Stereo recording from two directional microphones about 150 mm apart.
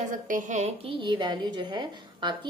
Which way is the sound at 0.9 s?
35° right (ahead or behind).